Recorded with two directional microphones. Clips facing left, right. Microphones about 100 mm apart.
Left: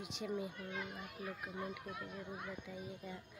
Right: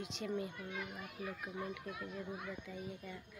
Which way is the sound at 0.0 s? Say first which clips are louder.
Right 1 dB; 5° left (ahead or behind).